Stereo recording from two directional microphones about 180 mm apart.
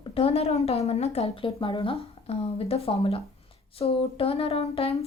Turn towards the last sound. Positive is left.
turn(degrees=35)  # may be behind; listen again after turning